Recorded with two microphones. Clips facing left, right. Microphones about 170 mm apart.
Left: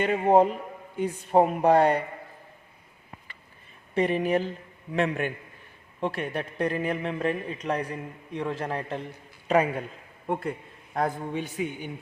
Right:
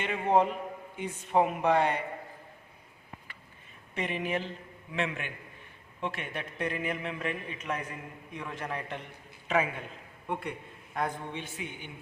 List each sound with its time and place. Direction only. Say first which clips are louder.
0.0 s speech: left 6 dB; 40° left (ahead or behind)
3.9 s speech: left 8 dB; 40° left (ahead or behind)
10.9 s speech: left 6 dB; 40° left (ahead or behind)